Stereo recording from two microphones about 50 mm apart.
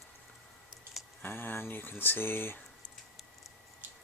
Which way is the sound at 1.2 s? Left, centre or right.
Left.